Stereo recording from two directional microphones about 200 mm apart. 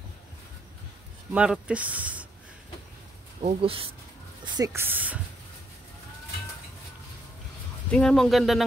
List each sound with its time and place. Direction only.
1.3 s speech: 5° right (ahead or behind)
3.3 s speech: 30° right (ahead or behind)
4.6 s speech: 10° right (ahead or behind)
7.9 s speech: 5° left (ahead or behind)